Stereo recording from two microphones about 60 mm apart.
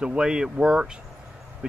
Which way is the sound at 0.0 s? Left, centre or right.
Centre.